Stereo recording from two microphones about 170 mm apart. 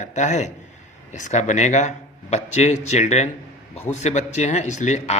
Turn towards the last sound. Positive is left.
turn(degrees=45)  # may be behind; listen again after turning